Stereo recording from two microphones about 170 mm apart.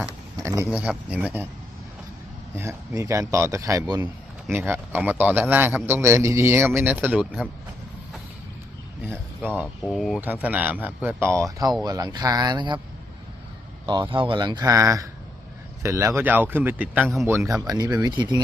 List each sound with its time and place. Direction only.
0.4 s speech: 15° right (ahead or behind)
2.6 s speech: 15° right (ahead or behind)
9.8 s speech: centre (ahead or behind); by 12.8 s 25° right (ahead or behind)
13.8 s speech: 25° right (ahead or behind)